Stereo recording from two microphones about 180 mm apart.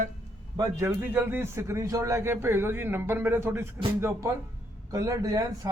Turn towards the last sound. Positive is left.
turn(degrees=-20)  # may be behind; listen again after turning